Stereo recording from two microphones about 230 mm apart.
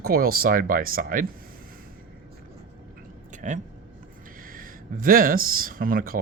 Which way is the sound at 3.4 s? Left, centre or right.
Right.